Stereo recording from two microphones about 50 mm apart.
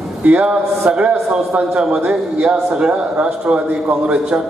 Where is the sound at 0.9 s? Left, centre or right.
Right.